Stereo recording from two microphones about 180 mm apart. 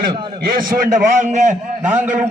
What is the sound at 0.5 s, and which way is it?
A man's voice, 50° right (ahead or behind).